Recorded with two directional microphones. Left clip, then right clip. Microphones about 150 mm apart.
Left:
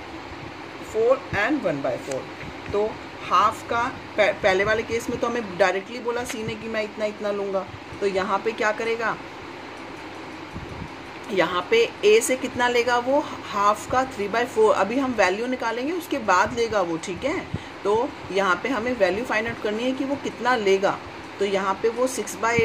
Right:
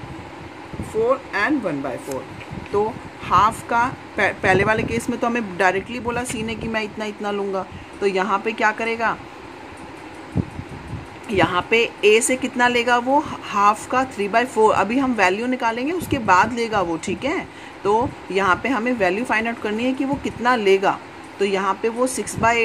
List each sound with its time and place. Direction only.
3.3 s speech: 70° right (ahead or behind)
11.3 s speech: 60° right (ahead or behind)